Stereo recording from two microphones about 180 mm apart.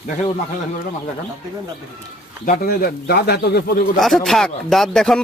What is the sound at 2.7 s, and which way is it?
Speech, 60° left (ahead or behind).